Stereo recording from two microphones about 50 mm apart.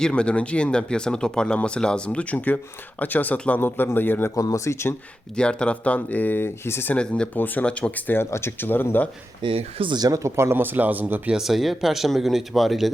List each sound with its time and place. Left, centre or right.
0.0 s speech: left
3.6 s speech: left
4.4 s speech: left
5.4 s speech: centre; by 6.9 s left
6.9 s speech: left
7.3 s speech: left
7.6 s speech: left
8.1 s speech: left
10.2 s speech: right
11.3 s speech: centre